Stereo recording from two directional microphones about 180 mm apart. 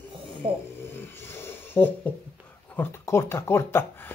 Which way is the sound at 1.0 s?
10° left (ahead or behind).